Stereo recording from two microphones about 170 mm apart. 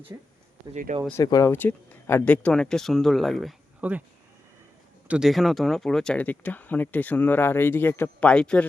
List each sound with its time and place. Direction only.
0.1 s speech: 20° right (ahead or behind)
0.7 s speech: 50° right (ahead or behind)
1.2 s speech: 20° left (ahead or behind); by 4.0 s 10° right (ahead or behind)
5.0 s speech: 5° right (ahead or behind)